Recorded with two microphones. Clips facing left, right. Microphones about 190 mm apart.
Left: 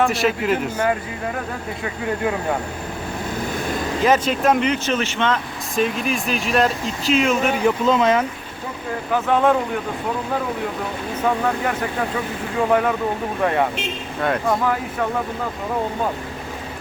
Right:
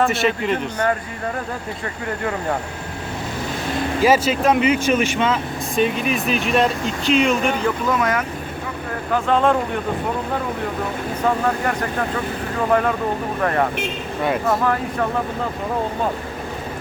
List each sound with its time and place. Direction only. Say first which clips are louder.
0.0 s speech: even; centre (ahead or behind)
4.0 s speech: right 1 dB; 5° right (ahead or behind)
7.6 s speech: left 3 dB; 25° left (ahead or behind)
9.3 s speech: even; 10° left (ahead or behind)
14.2 s speech: even; 5° right (ahead or behind)